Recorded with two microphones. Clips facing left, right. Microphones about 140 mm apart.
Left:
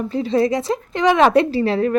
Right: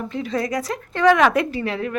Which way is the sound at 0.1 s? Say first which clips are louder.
Left 7 dB; 30° left (ahead or behind).